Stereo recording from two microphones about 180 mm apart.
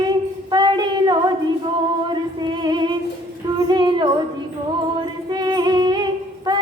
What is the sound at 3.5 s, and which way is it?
Female singing, 25° right (ahead or behind).